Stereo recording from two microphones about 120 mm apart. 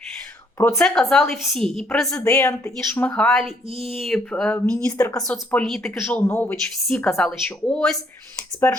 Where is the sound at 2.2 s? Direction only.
15° left (ahead or behind).